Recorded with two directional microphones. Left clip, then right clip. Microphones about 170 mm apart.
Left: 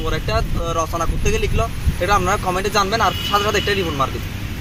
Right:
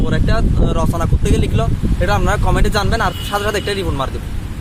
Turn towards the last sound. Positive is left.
turn(degrees=-35)  # may be behind; listen again after turning